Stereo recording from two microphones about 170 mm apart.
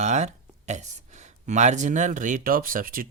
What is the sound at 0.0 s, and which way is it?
Speech, 45° right (ahead or behind).